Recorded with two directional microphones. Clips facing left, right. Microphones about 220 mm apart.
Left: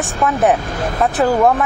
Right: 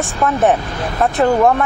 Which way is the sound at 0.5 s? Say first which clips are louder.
Left 1 dB; 45° left (ahead or behind).